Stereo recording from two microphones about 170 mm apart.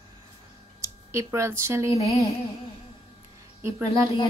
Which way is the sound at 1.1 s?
15° right (ahead or behind).